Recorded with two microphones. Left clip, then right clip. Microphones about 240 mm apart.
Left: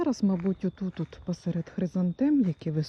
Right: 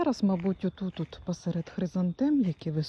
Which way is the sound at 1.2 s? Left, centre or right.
Right.